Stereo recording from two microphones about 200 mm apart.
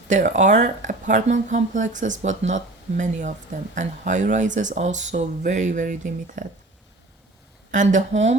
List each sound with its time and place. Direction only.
0.1 s speech: 35° right (ahead or behind)
7.7 s speech: 40° right (ahead or behind)